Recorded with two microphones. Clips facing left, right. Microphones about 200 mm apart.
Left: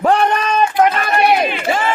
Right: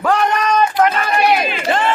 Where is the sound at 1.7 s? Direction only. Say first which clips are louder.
Right 3 dB; 5° left (ahead or behind).